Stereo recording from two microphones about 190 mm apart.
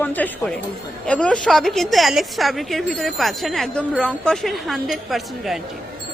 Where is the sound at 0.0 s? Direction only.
10° left (ahead or behind).